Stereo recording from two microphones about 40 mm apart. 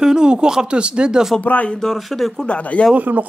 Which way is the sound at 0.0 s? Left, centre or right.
Centre.